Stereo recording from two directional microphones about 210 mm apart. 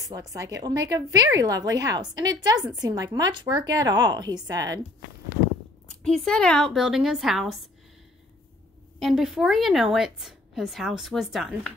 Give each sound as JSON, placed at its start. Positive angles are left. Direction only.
{"t": 0.1, "sound": "a woman's voice", "side_deg": -15}
{"t": 6.0, "sound": "a woman's voice", "side_deg": 5}
{"t": 9.0, "sound": "a woman's voice", "side_deg": 0}